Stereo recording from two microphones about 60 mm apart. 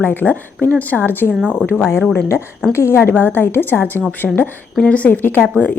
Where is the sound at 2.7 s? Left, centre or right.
Left.